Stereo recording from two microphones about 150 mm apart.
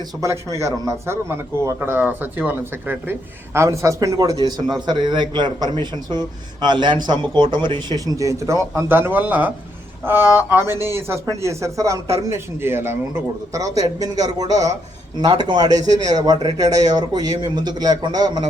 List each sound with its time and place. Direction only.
0.6 s a man's voice: 20° right (ahead or behind)